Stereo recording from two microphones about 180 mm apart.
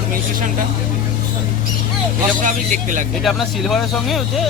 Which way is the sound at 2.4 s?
45° right (ahead or behind).